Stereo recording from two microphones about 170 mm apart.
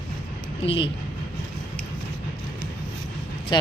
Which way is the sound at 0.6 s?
35° left (ahead or behind).